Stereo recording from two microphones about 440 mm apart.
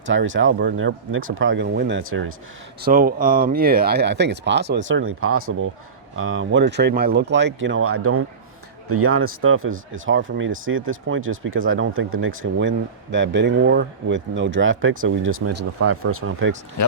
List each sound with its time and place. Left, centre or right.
0.0 s speech: right
16.8 s speech: left